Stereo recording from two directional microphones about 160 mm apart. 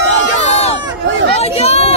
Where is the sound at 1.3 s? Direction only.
40° left (ahead or behind).